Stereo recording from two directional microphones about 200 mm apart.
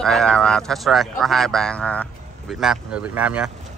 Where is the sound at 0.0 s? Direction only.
5° left (ahead or behind).